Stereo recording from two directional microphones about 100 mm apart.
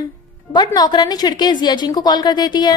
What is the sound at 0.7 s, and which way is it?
A woman's voice, 45° left (ahead or behind).